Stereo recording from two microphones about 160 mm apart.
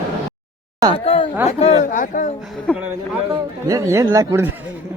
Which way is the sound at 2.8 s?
10° right (ahead or behind).